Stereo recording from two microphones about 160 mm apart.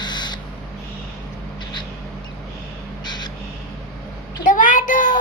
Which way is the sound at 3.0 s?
25° left (ahead or behind).